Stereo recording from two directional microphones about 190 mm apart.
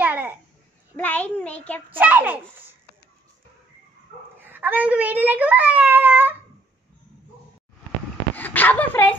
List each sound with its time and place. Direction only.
0.0 s babbling: 10° right (ahead or behind)
0.9 s a child's voice: 10° left (ahead or behind)
2.0 s a child's voice: 10° right (ahead or behind)
4.4 s a child's voice: 10° right (ahead or behind)
8.4 s speech: 10° left (ahead or behind)